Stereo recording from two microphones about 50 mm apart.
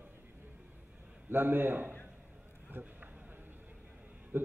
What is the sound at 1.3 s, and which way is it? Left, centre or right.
A man's voice, right.